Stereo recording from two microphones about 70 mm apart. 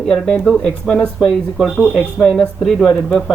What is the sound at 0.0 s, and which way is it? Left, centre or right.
Speech, centre.